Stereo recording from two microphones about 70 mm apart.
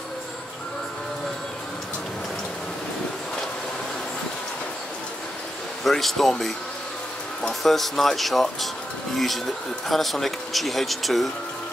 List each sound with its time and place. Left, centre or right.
5.9 s speech: centre
7.6 s speech: centre
9.8 s speech: centre